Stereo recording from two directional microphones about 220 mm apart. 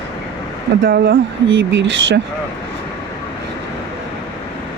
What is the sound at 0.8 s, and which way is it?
Speech, 50° right (ahead or behind).